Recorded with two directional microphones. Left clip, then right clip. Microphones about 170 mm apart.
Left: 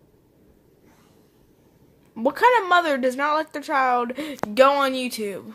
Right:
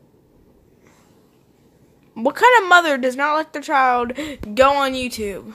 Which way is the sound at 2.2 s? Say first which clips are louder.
Right 4 dB; 5° right (ahead or behind).